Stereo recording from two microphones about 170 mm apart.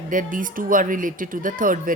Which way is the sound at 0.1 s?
50° right (ahead or behind).